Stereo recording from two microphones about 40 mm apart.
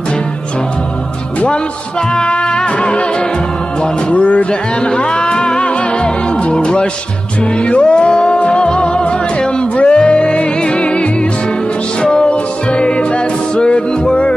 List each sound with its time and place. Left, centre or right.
1.5 s music: left
4.1 s music: left
4.7 s music: left